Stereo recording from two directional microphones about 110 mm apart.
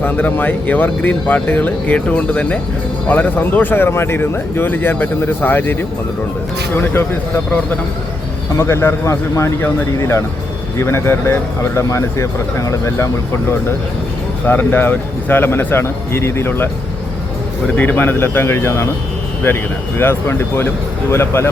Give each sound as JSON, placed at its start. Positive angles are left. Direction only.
{"t": 0.0, "sound": "a man's voice", "side_deg": 15}
{"t": 6.7, "sound": "a man's voice", "side_deg": 15}
{"t": 14.4, "sound": "speech", "side_deg": 15}
{"t": 17.7, "sound": "speech", "side_deg": 15}